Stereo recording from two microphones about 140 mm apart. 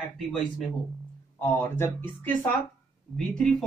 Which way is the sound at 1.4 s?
15° left (ahead or behind).